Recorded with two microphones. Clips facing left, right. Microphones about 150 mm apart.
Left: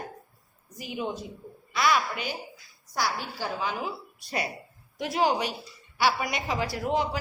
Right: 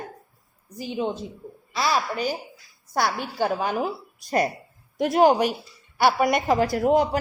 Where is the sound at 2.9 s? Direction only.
55° right (ahead or behind).